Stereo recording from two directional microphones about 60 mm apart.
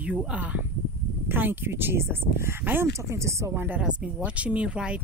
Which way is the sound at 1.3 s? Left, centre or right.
Right.